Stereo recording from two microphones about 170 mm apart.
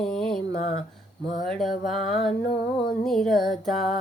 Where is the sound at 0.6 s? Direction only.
40° left (ahead or behind).